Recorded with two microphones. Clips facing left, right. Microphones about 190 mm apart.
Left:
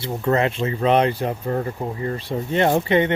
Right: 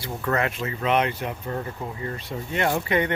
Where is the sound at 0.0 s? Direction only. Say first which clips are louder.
Left 5 dB; 25° left (ahead or behind).